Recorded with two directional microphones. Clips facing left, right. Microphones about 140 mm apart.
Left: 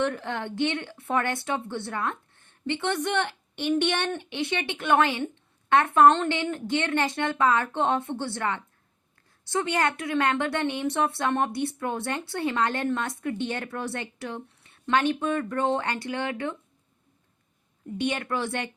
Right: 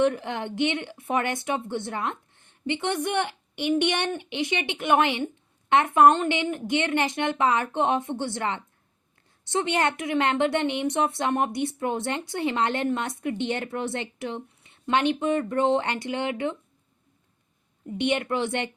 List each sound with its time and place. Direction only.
0.0 s a woman's voice: 15° right (ahead or behind)
17.9 s a woman's voice: 20° right (ahead or behind)